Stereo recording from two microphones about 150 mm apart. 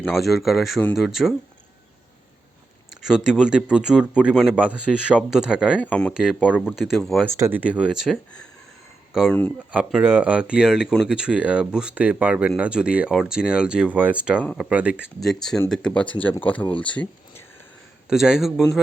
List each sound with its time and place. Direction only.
0.0 s speech: centre (ahead or behind)
2.9 s speech: 5° right (ahead or behind)
5.8 s speech: 10° left (ahead or behind)
6.6 s speech: centre (ahead or behind)
7.3 s speech: 15° right (ahead or behind); by 9.5 s 5° left (ahead or behind)
9.7 s speech: 10° right (ahead or behind)
14.7 s speech: 10° right (ahead or behind)
15.2 s speech: centre (ahead or behind)
18.1 s speech: 5° right (ahead or behind)